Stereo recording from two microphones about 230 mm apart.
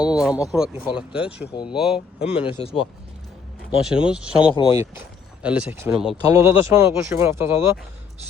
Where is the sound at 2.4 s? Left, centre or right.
Left.